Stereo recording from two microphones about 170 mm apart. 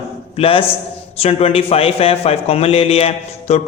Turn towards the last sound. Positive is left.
turn(degrees=35)  # may be behind; listen again after turning